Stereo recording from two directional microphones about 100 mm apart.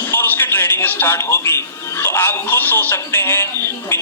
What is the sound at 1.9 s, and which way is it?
Speech, 25° left (ahead or behind).